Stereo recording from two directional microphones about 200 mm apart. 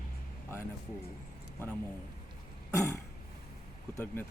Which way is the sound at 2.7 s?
15° left (ahead or behind).